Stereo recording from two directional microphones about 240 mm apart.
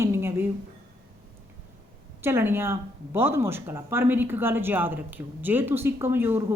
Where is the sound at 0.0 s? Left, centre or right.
Centre.